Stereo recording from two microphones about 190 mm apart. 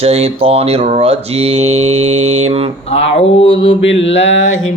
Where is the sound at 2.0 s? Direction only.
90° right.